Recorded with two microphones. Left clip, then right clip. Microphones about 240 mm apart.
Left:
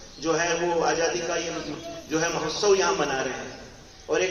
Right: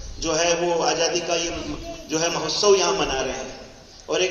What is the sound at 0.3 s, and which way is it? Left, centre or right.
A man's voice, right.